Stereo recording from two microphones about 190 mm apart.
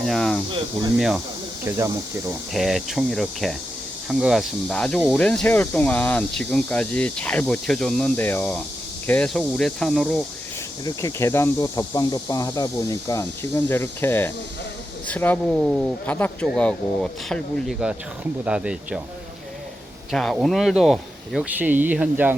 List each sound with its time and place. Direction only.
0.0 s speech: centre (ahead or behind)
2.5 s speech: centre (ahead or behind)
10.8 s speech: 15° left (ahead or behind); by 19.0 s 5° right (ahead or behind)
20.1 s speech: centre (ahead or behind)